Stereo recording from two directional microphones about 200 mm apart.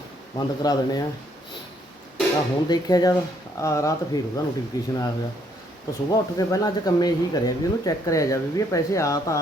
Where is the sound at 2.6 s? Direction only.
20° left (ahead or behind).